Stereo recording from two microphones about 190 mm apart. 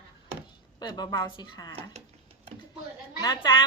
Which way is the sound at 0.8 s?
20° left (ahead or behind).